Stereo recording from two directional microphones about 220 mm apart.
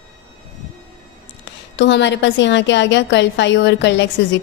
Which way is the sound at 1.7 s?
55° left (ahead or behind).